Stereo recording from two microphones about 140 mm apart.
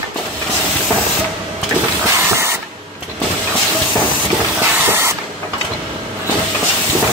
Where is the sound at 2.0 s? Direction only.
20° right (ahead or behind).